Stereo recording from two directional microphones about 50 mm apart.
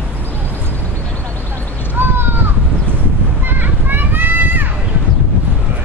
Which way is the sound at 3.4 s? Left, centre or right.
Right.